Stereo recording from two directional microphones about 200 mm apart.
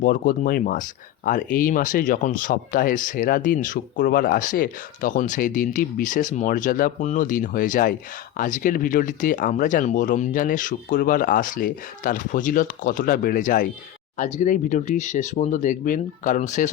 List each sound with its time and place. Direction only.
0.0 s speech: 45° left (ahead or behind)